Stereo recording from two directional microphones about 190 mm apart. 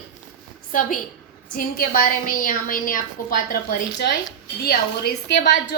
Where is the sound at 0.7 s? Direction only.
45° left (ahead or behind).